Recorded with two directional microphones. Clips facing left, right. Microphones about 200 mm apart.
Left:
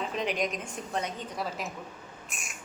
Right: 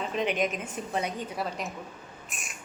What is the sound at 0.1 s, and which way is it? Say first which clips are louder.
A woman's voice: right 2 dB; centre (ahead or behind).